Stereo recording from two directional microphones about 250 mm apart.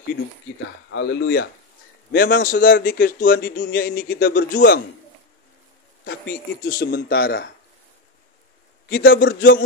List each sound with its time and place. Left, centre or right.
0.8 s speech: left
6.0 s speech: left
8.8 s speech: left